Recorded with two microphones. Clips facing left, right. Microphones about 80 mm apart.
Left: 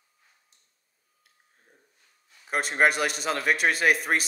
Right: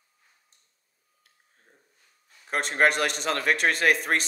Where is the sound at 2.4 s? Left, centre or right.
Centre.